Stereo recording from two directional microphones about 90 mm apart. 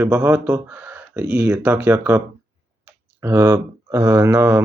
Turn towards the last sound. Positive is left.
turn(degrees=-30)  # may be behind; listen again after turning